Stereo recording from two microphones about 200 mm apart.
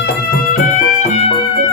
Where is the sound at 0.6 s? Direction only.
40° left (ahead or behind).